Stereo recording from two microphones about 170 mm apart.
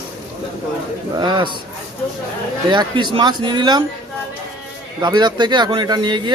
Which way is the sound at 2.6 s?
25° right (ahead or behind).